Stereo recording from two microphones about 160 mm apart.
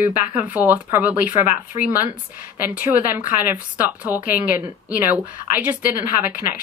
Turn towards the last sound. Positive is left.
turn(degrees=-10)  # may be behind; listen again after turning